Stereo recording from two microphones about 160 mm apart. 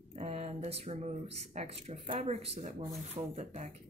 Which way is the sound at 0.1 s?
45° right (ahead or behind).